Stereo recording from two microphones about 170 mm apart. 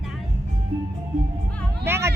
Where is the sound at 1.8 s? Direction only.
15° right (ahead or behind).